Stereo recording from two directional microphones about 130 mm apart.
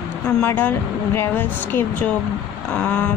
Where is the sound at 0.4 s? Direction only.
15° left (ahead or behind).